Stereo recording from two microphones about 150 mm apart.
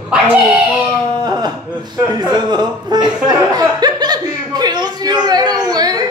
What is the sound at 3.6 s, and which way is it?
Chuckle, 25° right (ahead or behind).